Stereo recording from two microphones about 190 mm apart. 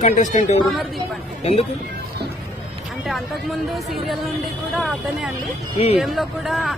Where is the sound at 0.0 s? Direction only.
40° left (ahead or behind).